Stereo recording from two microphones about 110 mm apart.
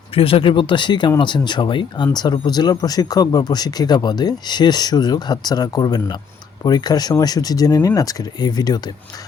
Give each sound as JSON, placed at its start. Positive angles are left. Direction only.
{"t": 0.1, "sound": "speech", "side_deg": 60}